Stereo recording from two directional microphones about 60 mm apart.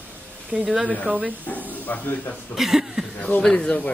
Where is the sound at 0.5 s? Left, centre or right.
Right.